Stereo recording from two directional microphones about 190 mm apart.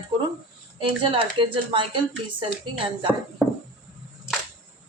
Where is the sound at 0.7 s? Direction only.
25° right (ahead or behind).